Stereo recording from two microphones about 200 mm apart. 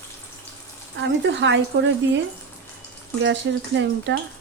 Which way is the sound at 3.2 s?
65° right (ahead or behind).